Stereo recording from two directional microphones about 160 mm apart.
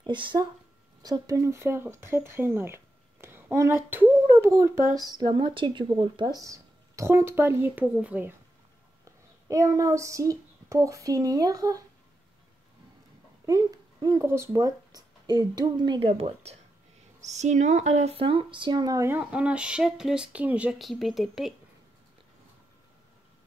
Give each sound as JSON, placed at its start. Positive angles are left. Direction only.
{"t": 0.0, "sound": "speech", "side_deg": -30}
{"t": 9.5, "sound": "speech", "side_deg": -20}
{"t": 13.5, "sound": "speech", "side_deg": -20}